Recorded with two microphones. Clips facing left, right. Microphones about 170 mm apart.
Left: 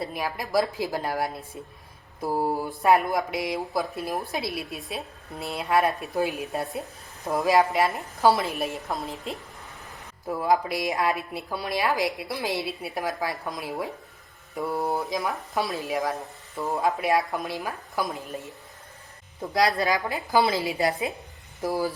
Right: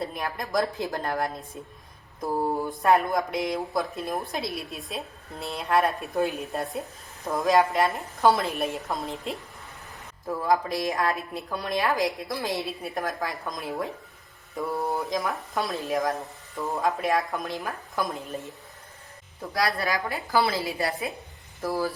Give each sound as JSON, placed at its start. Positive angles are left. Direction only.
{"t": 0.0, "sound": "speech", "side_deg": 5}
{"t": 10.2, "sound": "speech", "side_deg": 10}
{"t": 11.3, "sound": "speech", "side_deg": 5}
{"t": 12.3, "sound": "speech", "side_deg": 20}
{"t": 12.6, "sound": "speech", "side_deg": 0}
{"t": 19.5, "sound": "a woman's voice", "side_deg": 20}